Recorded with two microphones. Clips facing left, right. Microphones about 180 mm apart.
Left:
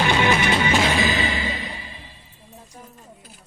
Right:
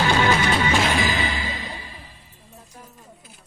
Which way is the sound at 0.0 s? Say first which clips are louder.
Even; 20° left (ahead or behind).